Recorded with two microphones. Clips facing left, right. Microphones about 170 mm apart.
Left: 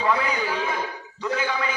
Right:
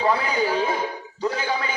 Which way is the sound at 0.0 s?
35° right (ahead or behind).